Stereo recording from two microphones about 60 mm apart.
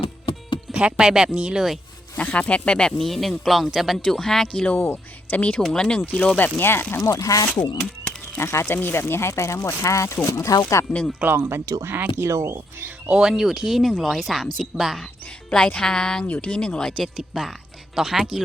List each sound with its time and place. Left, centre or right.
0.7 s speech: centre
2.1 s speech: left
3.0 s speech: centre
4.6 s speech: left
6.6 s speech: left
6.9 s speech: left
7.8 s a sound: centre
8.4 s speech: left
11.2 s speech: right
12.2 s speech: right
13.1 s speech: centre
15.4 s speech: centre
16.2 s speech: left
17.0 s speech: centre